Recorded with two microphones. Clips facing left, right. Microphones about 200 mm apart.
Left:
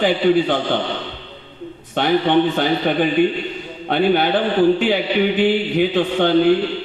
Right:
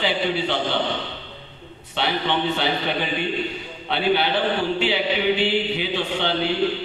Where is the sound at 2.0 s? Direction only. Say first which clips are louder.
Left 8 dB; 50° left (ahead or behind).